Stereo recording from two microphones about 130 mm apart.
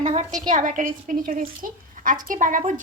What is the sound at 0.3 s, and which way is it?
A woman's voice, 70° right (ahead or behind).